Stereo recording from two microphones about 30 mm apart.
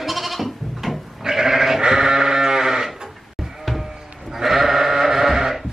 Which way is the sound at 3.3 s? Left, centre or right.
Centre.